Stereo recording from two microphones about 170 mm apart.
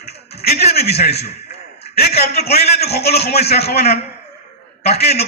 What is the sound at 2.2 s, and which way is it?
A man's voice, 70° left (ahead or behind).